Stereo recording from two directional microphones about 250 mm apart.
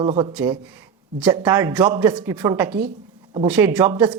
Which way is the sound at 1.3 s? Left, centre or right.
Centre.